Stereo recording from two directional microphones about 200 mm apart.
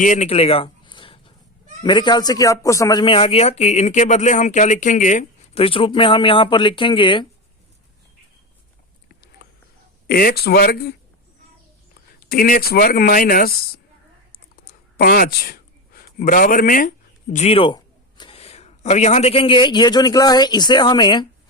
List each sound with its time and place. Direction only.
0.0 s speech: 35° left (ahead or behind)
9.0 s a sound: 50° left (ahead or behind)
10.1 s speech: 50° left (ahead or behind)
12.2 s speech: 45° left (ahead or behind)
14.9 s a man's voice: 50° left (ahead or behind)
17.3 s speech: 30° left (ahead or behind)